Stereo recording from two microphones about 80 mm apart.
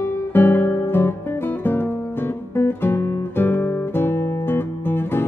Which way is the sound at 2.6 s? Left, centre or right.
Left.